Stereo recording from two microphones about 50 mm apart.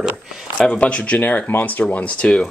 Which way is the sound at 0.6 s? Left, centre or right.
Left.